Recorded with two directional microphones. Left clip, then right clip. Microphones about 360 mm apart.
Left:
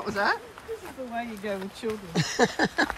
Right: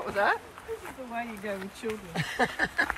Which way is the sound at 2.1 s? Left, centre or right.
Centre.